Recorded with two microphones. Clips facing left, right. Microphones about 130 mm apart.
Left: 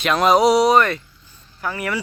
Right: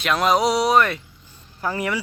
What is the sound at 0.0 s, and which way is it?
A man's voice, centre (ahead or behind).